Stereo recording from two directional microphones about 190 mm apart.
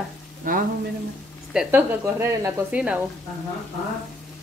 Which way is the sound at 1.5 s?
5° right (ahead or behind).